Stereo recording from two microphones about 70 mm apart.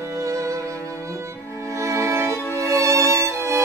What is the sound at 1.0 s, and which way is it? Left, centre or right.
Music, right.